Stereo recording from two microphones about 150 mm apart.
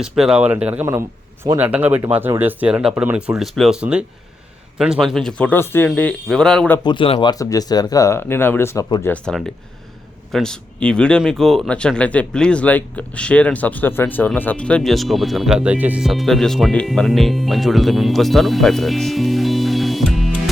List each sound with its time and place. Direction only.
0.0 s speech: 5° right (ahead or behind)
6.8 s speech: 35° left (ahead or behind); by 20.1 s centre (ahead or behind)